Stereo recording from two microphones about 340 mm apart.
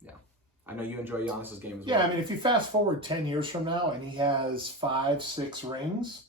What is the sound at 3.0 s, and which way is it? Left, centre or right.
Speech, centre.